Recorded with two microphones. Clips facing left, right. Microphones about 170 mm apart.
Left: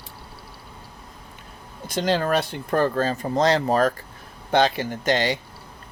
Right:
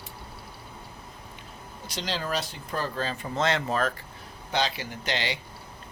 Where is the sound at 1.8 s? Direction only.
50° left (ahead or behind).